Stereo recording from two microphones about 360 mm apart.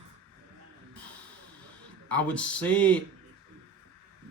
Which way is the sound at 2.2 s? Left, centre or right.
Centre.